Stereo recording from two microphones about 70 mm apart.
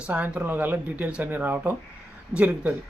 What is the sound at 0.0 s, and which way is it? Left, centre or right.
Speech, centre.